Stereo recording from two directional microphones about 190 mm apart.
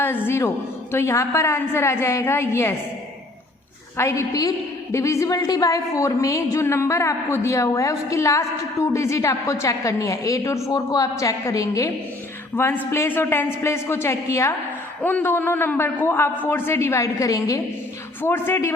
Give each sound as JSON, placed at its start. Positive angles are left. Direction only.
{"t": 0.3, "sound": "a woman's voice", "side_deg": 15}
{"t": 3.9, "sound": "a woman's voice", "side_deg": 15}